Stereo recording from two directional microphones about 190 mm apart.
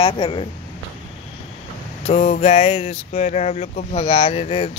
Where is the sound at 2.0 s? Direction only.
35° left (ahead or behind).